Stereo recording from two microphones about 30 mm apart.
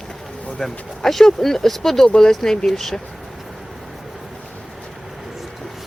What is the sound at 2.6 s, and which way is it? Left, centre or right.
Speech, centre.